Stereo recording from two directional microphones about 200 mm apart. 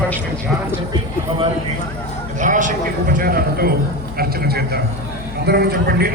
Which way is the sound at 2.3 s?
40° right (ahead or behind).